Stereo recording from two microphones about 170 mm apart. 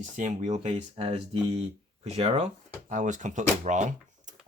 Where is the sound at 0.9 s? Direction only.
30° right (ahead or behind).